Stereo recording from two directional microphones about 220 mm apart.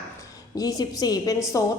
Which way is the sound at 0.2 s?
15° left (ahead or behind).